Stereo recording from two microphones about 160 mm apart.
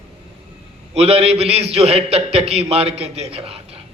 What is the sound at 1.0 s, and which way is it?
A man's voice, 35° right (ahead or behind).